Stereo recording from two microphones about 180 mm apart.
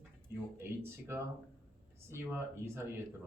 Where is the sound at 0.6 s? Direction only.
15° right (ahead or behind).